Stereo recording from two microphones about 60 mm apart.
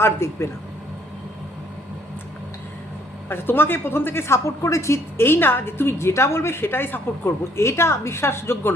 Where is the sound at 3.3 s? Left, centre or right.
Left.